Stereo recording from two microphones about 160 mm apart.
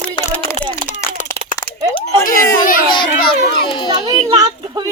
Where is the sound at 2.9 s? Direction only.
30° left (ahead or behind).